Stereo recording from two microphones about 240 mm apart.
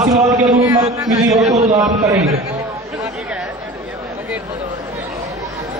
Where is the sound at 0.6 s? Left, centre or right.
Centre.